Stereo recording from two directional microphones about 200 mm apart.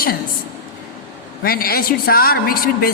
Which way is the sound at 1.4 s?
50° left (ahead or behind).